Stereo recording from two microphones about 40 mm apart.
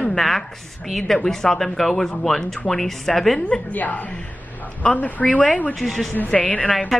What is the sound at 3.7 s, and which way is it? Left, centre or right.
Speech, left.